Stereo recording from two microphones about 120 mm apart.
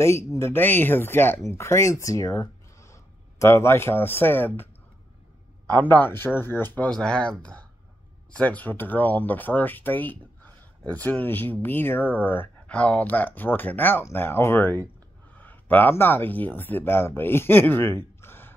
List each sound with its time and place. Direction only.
0.0 s speech: 25° left (ahead or behind)
5.7 s speech: 15° left (ahead or behind)
18.2 s a sound: 20° left (ahead or behind)